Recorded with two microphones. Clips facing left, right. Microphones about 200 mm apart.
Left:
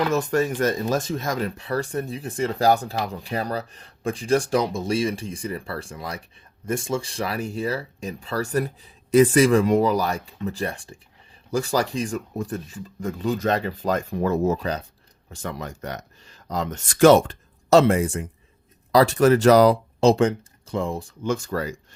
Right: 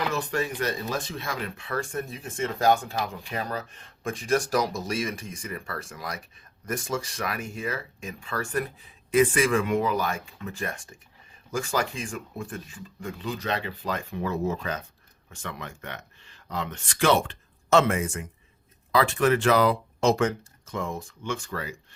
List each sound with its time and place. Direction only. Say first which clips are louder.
0.1 s speech: left 7 dB; 45° left (ahead or behind)